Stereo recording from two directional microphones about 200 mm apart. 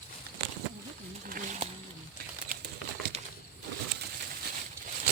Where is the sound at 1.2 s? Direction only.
40° right (ahead or behind).